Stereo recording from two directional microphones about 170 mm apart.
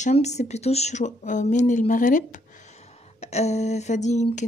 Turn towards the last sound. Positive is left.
turn(degrees=40)  # may be behind; listen again after turning